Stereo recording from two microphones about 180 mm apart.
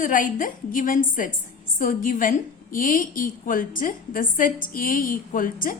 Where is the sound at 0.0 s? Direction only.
45° left (ahead or behind).